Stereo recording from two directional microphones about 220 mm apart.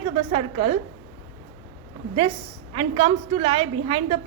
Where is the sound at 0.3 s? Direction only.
25° right (ahead or behind).